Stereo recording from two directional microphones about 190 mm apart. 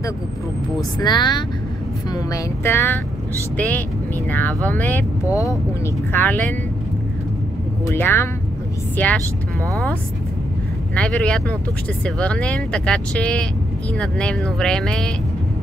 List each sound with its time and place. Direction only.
0.9 s speech: 20° left (ahead or behind)
4.3 s speech: 10° left (ahead or behind)
6.1 s speech: 10° left (ahead or behind)
7.8 s speech: 10° left (ahead or behind)
11.0 s speech: 5° left (ahead or behind)